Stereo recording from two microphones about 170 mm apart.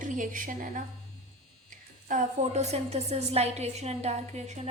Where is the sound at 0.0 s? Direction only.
50° right (ahead or behind).